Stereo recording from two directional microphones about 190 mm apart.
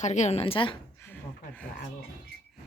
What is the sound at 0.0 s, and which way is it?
Speech, 40° left (ahead or behind).